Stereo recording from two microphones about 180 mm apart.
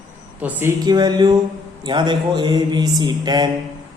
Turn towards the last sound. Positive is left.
turn(degrees=-25)  # may be behind; listen again after turning